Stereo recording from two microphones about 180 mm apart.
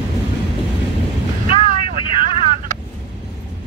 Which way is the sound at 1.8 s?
30° left (ahead or behind).